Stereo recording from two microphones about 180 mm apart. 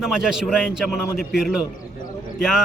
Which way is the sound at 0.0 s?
5° right (ahead or behind).